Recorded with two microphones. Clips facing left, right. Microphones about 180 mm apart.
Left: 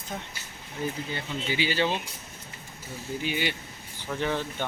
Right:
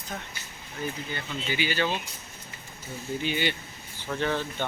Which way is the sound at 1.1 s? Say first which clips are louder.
Left 1 dB; 30° left (ahead or behind).